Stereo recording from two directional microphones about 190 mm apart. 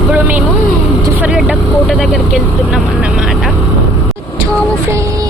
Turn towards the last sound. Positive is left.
turn(degrees=-5)  # may be behind; listen again after turning